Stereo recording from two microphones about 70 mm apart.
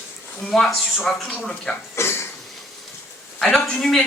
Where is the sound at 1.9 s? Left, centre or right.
Left.